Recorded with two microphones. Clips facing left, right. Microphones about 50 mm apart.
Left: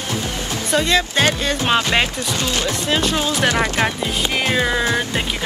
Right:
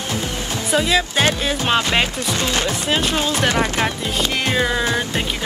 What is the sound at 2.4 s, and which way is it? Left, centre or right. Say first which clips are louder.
Speech: right 1 dB; right.